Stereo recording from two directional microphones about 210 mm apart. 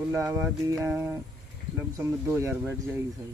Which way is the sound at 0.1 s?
15° right (ahead or behind).